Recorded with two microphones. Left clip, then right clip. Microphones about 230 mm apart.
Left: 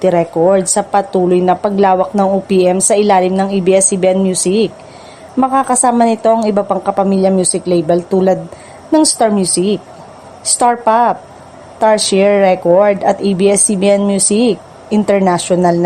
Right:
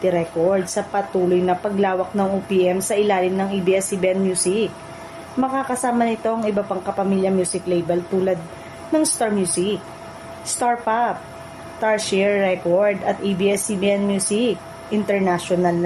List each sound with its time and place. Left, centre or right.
0.0 s speech: left
10.6 s speech: left